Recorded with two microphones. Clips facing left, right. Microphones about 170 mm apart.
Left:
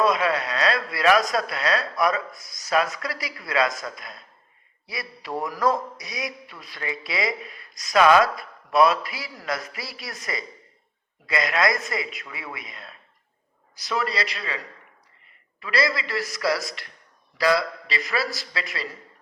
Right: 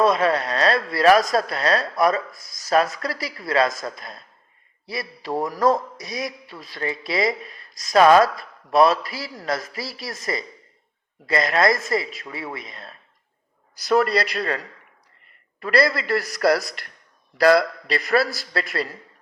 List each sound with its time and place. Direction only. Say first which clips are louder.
0.0 s a man's voice: right 3 dB; 40° right (ahead or behind)
13.9 s a man's voice: right 8 dB; 55° right (ahead or behind)
15.6 s a man's voice: right 5 dB; 55° right (ahead or behind)